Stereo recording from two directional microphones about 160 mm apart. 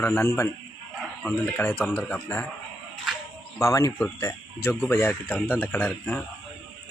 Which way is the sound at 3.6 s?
20° left (ahead or behind).